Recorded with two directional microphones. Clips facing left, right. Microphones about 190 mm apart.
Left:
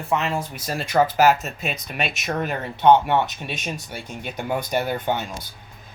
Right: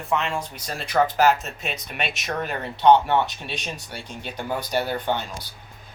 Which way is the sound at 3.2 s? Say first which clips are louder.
Left 2 dB; 45° left (ahead or behind).